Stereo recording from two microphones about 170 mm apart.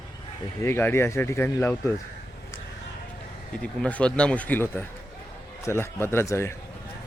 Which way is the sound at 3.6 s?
10° left (ahead or behind).